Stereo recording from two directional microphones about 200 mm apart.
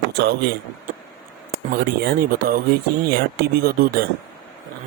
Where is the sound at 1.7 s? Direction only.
50° right (ahead or behind).